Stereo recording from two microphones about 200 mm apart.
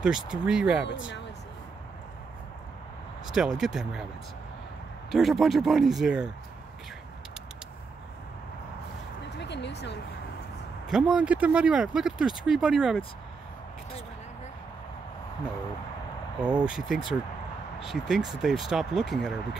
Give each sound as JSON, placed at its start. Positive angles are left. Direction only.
{"t": 0.0, "sound": "speech", "side_deg": -5}
{"t": 3.3, "sound": "speech", "side_deg": 0}
{"t": 5.1, "sound": "speech", "side_deg": 0}
{"t": 9.4, "sound": "a sound", "side_deg": 60}
{"t": 10.9, "sound": "speech", "side_deg": -5}
{"t": 16.3, "sound": "speech", "side_deg": -5}